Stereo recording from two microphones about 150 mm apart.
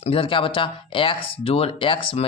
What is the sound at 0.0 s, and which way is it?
Speech, 35° left (ahead or behind).